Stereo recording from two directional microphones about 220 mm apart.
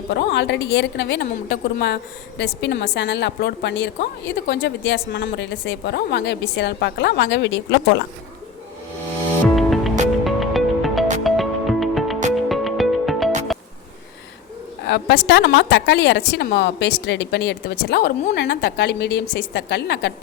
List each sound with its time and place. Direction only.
0.1 s a woman's voice: 50° left (ahead or behind)
9.6 s music: centre (ahead or behind)
14.8 s a woman's voice: 50° left (ahead or behind)